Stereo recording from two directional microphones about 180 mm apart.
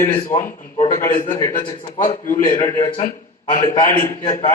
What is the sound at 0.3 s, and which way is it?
A man's voice, 45° left (ahead or behind).